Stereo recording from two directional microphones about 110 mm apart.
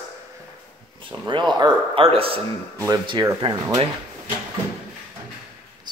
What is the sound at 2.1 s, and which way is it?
Speech, 60° right (ahead or behind).